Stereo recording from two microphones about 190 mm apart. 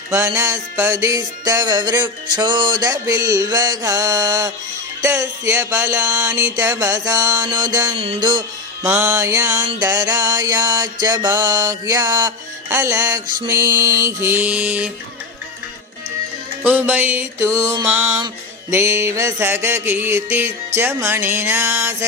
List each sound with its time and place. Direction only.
0.1 s music: 15° right (ahead or behind)
7.9 s music: 30° right (ahead or behind)
8.8 s music: 10° right (ahead or behind)
16.6 s music: 10° right (ahead or behind)